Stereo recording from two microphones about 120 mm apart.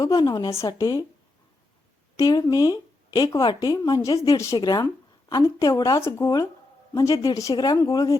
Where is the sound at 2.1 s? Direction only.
30° left (ahead or behind).